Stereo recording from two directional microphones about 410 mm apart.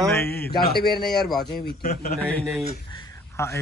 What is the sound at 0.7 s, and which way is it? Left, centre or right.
Speech, left.